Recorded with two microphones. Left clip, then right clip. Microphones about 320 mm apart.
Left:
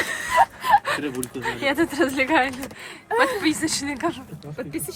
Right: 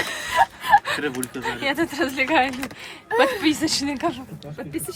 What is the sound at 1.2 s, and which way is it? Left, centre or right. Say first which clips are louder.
Speech: left 1 dB; centre.